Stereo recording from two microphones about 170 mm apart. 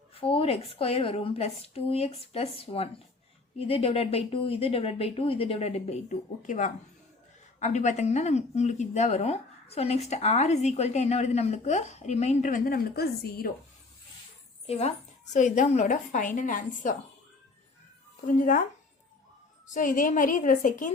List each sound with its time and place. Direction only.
0.1 s speech: 35° left (ahead or behind); by 13.5 s 60° left (ahead or behind)
14.7 s a woman's voice: 40° left (ahead or behind)
18.3 s a woman's voice: 50° left (ahead or behind)
19.6 s a woman's voice: 50° left (ahead or behind)